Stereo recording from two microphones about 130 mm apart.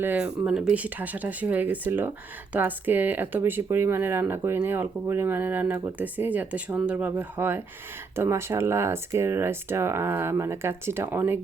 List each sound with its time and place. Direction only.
0.0 s speech: 10° right (ahead or behind)